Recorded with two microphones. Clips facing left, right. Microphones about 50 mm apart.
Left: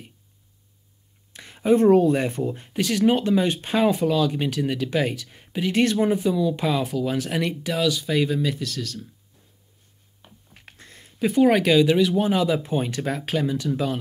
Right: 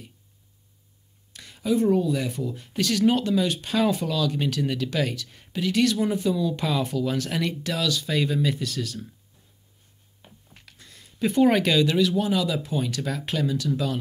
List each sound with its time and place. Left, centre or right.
1.3 s a sound: left
1.9 s speech: left
2.1 s speech: left
2.7 s speech: centre
5.7 s speech: left
6.1 s speech: centre
10.6 s a sound: left
11.1 s speech: centre
12.2 s speech: left